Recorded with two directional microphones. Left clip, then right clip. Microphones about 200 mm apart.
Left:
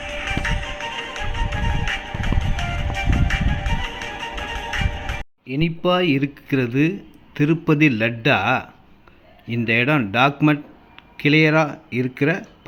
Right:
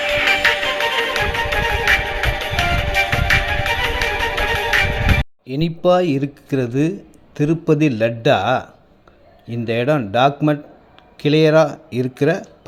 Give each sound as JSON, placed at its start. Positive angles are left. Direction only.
{"t": 0.0, "sound": "music", "side_deg": -45}
{"t": 5.5, "sound": "speech", "side_deg": -5}